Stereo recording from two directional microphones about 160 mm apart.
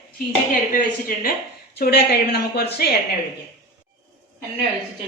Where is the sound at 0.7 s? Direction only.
65° left (ahead or behind).